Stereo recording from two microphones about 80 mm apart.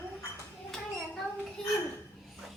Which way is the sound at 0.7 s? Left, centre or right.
Centre.